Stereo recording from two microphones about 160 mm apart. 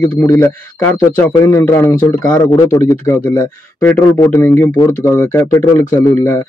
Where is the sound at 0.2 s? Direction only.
15° left (ahead or behind).